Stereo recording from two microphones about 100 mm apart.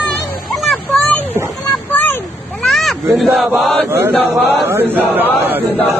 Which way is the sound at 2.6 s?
Centre (ahead or behind).